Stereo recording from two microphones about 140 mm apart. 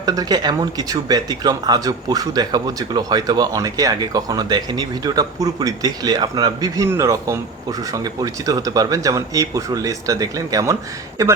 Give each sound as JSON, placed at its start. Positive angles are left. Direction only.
{"t": 0.0, "sound": "speech", "side_deg": -25}